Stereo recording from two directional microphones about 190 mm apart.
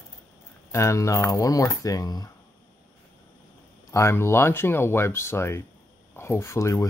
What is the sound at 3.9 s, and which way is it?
Speech, 15° left (ahead or behind).